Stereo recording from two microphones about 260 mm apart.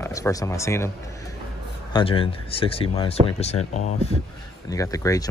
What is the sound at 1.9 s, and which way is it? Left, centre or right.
Speech, centre.